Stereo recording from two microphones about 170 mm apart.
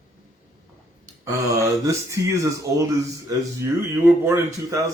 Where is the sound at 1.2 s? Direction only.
20° right (ahead or behind).